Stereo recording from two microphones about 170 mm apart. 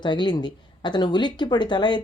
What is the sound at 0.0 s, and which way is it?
Speech, 25° left (ahead or behind).